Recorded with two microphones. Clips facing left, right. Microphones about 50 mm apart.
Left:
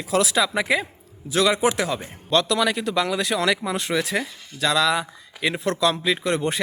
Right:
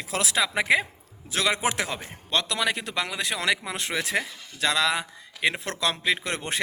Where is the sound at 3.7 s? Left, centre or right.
Right.